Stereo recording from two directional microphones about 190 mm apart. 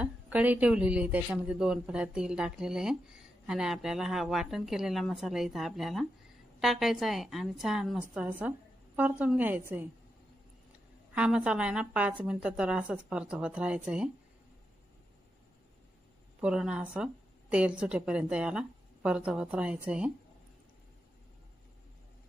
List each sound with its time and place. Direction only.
0.0 s a woman's voice: 10° right (ahead or behind)
11.1 s a woman's voice: 5° right (ahead or behind)
16.3 s a woman's voice: 5° right (ahead or behind)